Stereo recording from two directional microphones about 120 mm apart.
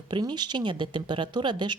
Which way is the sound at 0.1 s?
40° right (ahead or behind).